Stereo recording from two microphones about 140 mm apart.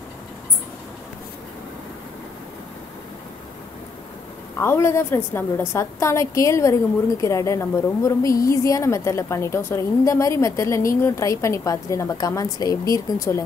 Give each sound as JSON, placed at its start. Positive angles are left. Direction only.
{"t": 4.6, "sound": "a woman's voice", "side_deg": 20}